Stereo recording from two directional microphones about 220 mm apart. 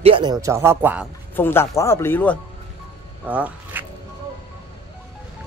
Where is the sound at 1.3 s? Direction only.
10° left (ahead or behind).